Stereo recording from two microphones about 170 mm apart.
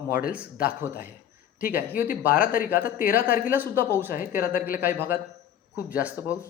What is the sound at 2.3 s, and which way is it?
Speech, 55° left (ahead or behind).